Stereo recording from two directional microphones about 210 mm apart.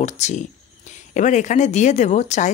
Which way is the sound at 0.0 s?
35° left (ahead or behind).